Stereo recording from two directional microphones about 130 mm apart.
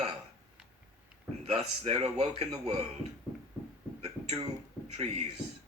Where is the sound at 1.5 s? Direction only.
50° right (ahead or behind).